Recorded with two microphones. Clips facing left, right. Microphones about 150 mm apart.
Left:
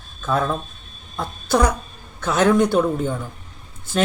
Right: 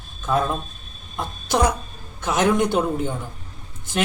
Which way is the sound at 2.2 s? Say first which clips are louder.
Left 3 dB; 20° right (ahead or behind).